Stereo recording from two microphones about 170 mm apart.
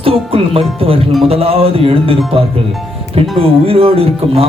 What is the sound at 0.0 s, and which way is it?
A man's voice, 35° right (ahead or behind).